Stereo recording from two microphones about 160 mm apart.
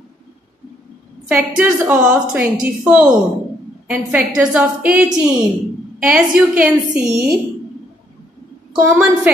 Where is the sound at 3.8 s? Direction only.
5° right (ahead or behind).